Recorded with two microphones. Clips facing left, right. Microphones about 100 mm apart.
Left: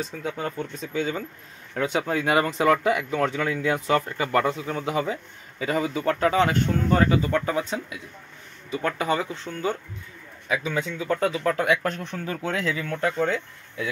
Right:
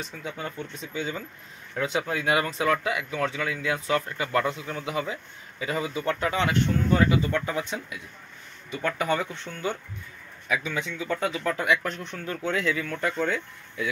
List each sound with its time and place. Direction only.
0.6 s speech: 45° left (ahead or behind)
1.8 s a man's voice: 30° left (ahead or behind)
2.1 s a man's voice: 45° left (ahead or behind)
12.4 s a man's voice: 35° left (ahead or behind)